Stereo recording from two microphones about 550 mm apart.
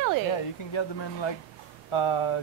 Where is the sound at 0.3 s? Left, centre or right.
Left.